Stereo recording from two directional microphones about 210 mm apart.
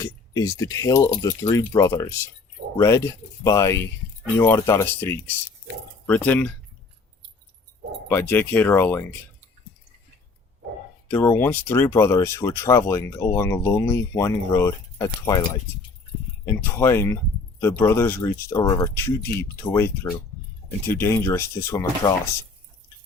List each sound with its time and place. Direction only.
0.0 s speech: 15° left (ahead or behind)
8.1 s speech: 10° left (ahead or behind)
11.1 s speech: 10° left (ahead or behind)
16.5 s speech: 10° left (ahead or behind)